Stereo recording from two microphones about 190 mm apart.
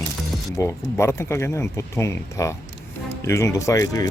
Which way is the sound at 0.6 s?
15° left (ahead or behind).